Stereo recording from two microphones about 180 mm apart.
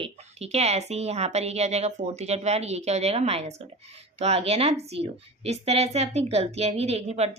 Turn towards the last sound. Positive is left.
turn(degrees=-35)  # may be behind; listen again after turning